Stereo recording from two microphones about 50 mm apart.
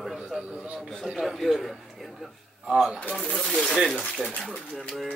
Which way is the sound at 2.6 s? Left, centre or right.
Centre.